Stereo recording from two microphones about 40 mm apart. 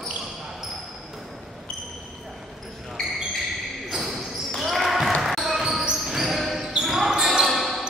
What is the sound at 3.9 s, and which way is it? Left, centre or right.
Basketball bounce, centre.